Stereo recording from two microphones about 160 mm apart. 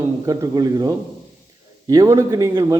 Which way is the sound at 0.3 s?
25° right (ahead or behind).